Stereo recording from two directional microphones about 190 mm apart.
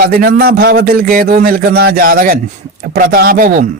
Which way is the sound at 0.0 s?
50° right (ahead or behind).